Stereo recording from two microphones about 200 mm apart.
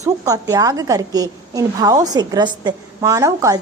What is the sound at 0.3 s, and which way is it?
A woman's voice, 15° right (ahead or behind).